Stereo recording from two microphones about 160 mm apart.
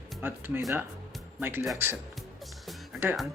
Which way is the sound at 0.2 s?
15° right (ahead or behind).